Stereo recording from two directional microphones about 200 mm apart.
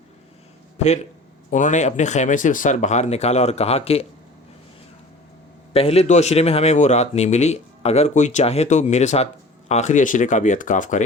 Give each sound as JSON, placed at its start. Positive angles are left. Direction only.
{"t": 1.5, "sound": "speech", "side_deg": 40}
{"t": 5.7, "sound": "speech", "side_deg": 30}